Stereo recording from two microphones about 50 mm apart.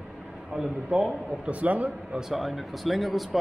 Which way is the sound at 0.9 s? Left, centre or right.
Right.